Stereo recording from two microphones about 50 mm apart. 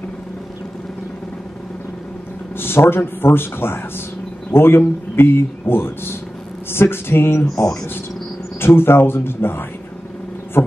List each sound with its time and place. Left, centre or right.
2.5 s a man's voice: left
8.5 s a man's voice: left